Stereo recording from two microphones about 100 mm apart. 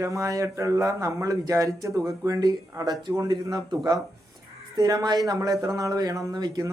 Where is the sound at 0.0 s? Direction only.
30° right (ahead or behind).